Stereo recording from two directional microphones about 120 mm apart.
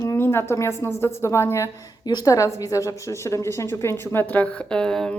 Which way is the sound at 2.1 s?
30° left (ahead or behind).